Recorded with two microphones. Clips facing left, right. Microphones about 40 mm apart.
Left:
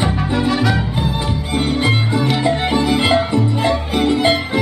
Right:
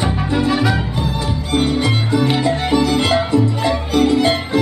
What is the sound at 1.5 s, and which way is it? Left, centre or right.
Music, centre.